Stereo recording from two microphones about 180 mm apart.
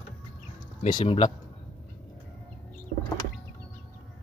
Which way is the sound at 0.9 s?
25° left (ahead or behind).